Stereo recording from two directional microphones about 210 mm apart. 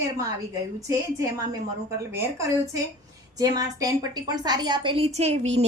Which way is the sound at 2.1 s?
15° right (ahead or behind).